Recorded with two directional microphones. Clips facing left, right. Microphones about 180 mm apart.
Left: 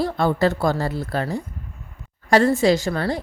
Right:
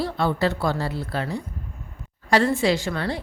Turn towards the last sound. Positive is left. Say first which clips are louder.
# left 4 dB
turn(degrees=40)  # may be behind; listen again after turning